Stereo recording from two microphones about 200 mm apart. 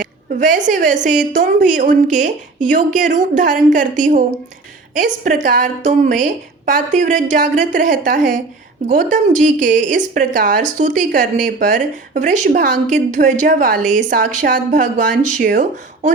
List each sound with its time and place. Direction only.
0.0 s a woman's voice: 40° right (ahead or behind)